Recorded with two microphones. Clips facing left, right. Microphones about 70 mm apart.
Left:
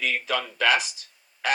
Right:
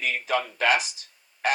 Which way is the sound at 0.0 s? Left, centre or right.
Right.